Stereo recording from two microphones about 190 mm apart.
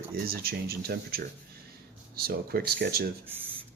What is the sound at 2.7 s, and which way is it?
Speech, 55° right (ahead or behind).